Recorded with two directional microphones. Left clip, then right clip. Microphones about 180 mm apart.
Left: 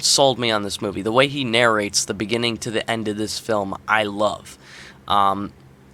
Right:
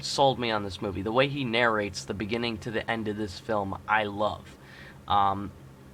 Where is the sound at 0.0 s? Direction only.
40° left (ahead or behind).